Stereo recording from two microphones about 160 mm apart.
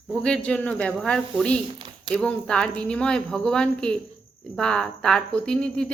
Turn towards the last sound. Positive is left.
turn(degrees=5)  # may be behind; listen again after turning